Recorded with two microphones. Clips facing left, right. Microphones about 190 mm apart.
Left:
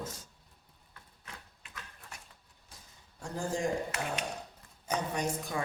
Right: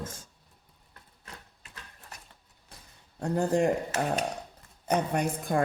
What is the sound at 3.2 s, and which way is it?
Speech, 65° right (ahead or behind).